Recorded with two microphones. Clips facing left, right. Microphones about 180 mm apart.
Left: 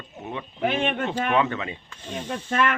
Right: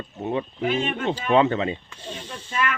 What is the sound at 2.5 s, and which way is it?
Speech, 60° left (ahead or behind).